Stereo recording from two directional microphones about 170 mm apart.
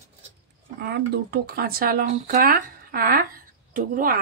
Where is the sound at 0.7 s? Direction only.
80° right.